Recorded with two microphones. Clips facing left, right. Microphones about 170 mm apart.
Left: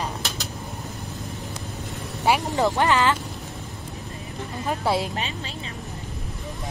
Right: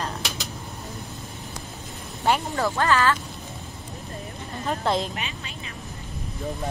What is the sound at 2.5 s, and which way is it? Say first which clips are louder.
Speech: left 2 dB; 20° left (ahead or behind).